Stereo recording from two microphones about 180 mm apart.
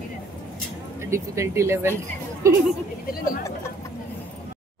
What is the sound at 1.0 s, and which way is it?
Speech, 15° right (ahead or behind).